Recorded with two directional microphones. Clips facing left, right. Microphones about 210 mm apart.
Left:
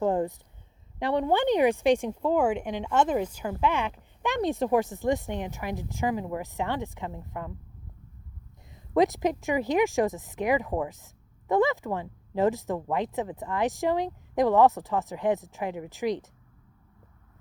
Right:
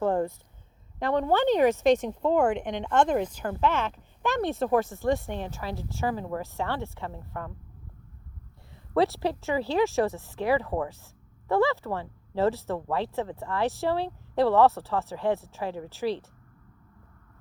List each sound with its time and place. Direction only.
0.0 s a sound: 15° left (ahead or behind)
0.9 s speech: 15° left (ahead or behind)
9.0 s speech: 15° left (ahead or behind)